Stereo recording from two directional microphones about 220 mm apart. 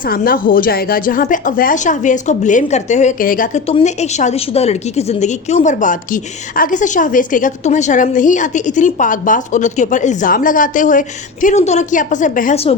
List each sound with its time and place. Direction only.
0.1 s a woman's voice: 40° left (ahead or behind)